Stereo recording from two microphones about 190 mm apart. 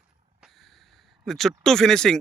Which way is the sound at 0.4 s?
Centre (ahead or behind).